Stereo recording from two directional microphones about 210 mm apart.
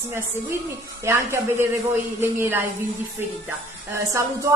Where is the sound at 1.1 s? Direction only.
10° right (ahead or behind).